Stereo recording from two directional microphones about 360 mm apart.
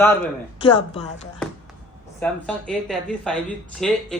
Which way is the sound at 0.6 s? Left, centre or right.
Centre.